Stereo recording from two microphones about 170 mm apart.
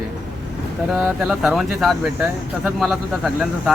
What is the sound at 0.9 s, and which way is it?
Speech, centre (ahead or behind).